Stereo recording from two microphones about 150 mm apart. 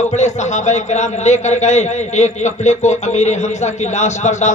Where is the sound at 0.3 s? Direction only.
50° left (ahead or behind).